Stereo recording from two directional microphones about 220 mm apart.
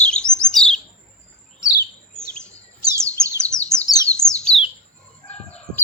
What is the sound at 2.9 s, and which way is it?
Bird, 10° right (ahead or behind).